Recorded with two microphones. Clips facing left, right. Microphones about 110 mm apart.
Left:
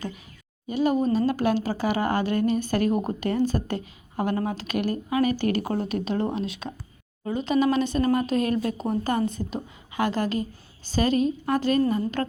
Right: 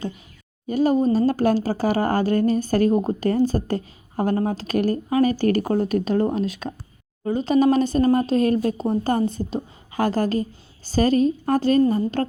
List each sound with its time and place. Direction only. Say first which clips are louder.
0.7 s speech: right 4 dB; 40° right (ahead or behind)